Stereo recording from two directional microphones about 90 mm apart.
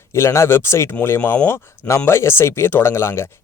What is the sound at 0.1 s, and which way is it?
Speech, 30° left (ahead or behind).